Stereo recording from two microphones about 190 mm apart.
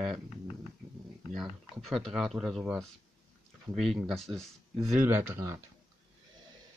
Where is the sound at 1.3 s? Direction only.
Centre (ahead or behind).